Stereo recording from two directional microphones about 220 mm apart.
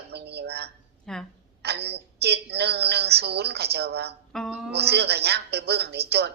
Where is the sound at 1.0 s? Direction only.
5° left (ahead or behind).